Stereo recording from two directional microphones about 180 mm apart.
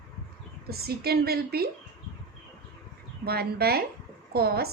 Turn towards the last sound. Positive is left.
turn(degrees=-60)  # may be behind; listen again after turning